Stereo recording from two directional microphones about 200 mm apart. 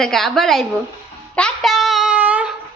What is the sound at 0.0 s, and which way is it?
Speech, centre (ahead or behind).